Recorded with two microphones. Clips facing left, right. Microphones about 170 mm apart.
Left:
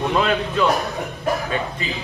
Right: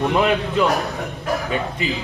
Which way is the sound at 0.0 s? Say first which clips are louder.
Right 2 dB; 15° right (ahead or behind).